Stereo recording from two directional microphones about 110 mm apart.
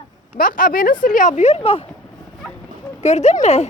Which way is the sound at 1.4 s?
70° left (ahead or behind).